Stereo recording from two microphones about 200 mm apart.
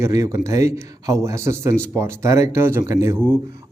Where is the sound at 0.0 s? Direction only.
15° right (ahead or behind).